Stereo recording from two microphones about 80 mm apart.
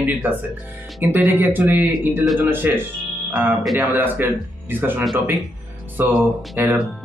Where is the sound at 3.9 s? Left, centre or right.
Right.